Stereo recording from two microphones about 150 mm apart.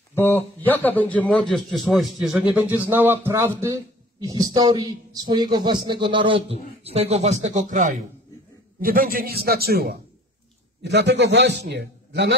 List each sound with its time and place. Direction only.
0.1 s a man's voice: 15° left (ahead or behind); by 7.9 s 55° right (ahead or behind)
8.8 s a man's voice: 75° right (ahead or behind); by 12.4 s 90° right